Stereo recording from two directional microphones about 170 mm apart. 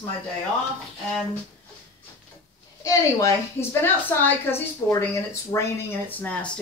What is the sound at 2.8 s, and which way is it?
A woman's voice, 20° left (ahead or behind).